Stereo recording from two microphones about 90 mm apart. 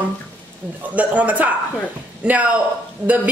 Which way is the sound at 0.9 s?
15° right (ahead or behind).